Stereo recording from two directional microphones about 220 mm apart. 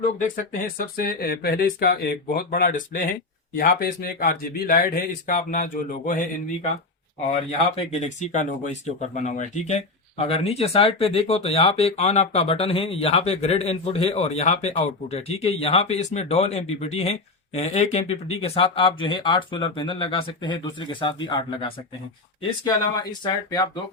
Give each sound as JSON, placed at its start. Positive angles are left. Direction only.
{"t": 0.0, "sound": "speech", "side_deg": 40}
{"t": 7.8, "sound": "speech", "side_deg": 30}
{"t": 23.2, "sound": "speech", "side_deg": 20}